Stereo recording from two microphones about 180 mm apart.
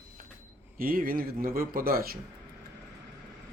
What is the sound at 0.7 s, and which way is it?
A man's voice, 50° right (ahead or behind).